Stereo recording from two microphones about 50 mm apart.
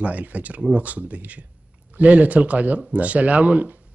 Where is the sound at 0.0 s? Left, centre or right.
Right.